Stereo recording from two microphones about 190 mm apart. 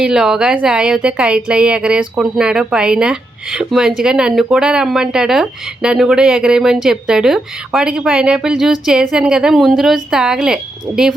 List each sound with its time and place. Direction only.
0.0 s speech: 5° right (ahead or behind)